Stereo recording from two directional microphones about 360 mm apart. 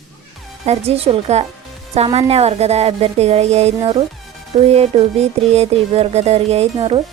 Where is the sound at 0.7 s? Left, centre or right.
Centre.